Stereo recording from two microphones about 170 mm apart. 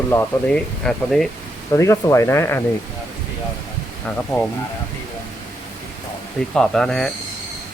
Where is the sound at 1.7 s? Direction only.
15° left (ahead or behind).